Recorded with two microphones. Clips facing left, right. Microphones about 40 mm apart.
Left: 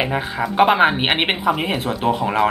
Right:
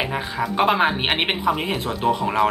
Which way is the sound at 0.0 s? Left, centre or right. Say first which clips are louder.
Left 3 dB; centre.